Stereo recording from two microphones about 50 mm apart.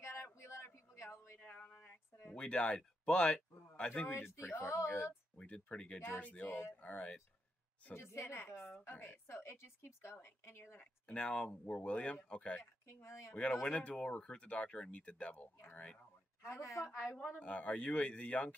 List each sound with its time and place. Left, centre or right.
0.4 s a sound: left
1.4 s a sound: left
1.8 s a sound: left
2.3 s speech: centre
4.1 s a woman's voice: left
5.4 s speech: left
7.9 s a woman's voice: left
11.1 s speech: left
12.8 s speech: left
13.3 s speech: left
16.4 s a woman's voice: left
16.8 s a woman's voice: left
17.4 s speech: left